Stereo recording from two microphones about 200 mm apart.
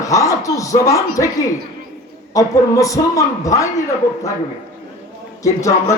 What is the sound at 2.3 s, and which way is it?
A man's voice, 15° left (ahead or behind).